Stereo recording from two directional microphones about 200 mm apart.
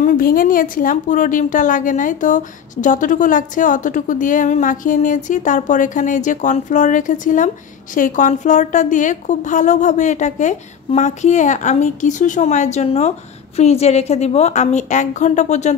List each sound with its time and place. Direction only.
0.0 s a woman's voice: 45° left (ahead or behind)